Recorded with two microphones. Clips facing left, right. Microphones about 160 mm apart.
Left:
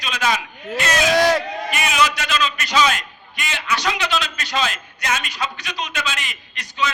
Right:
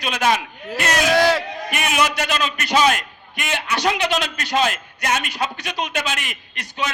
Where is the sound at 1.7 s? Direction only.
55° right (ahead or behind).